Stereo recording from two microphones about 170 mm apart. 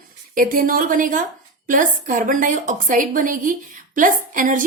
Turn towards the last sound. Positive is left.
turn(degrees=-50)  # may be behind; listen again after turning